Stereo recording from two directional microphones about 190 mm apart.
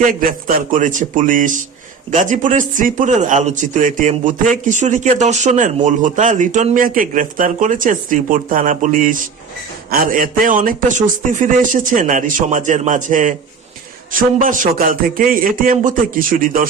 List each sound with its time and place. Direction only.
0.1 s a man's voice: 45° right (ahead or behind)